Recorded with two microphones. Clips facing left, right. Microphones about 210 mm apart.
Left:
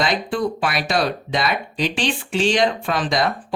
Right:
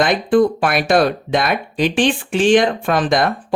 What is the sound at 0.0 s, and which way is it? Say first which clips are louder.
Speech: right 7 dB; 50° right (ahead or behind).